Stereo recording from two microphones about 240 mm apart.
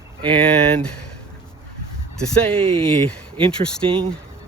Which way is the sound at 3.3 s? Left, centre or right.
Right.